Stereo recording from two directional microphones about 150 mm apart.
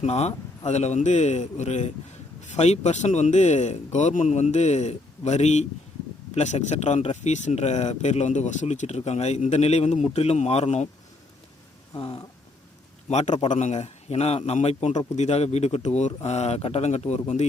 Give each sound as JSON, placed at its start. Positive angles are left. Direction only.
{"t": 0.0, "sound": "speech", "side_deg": 45}
{"t": 11.9, "sound": "speech", "side_deg": 35}
{"t": 13.1, "sound": "speech", "side_deg": 50}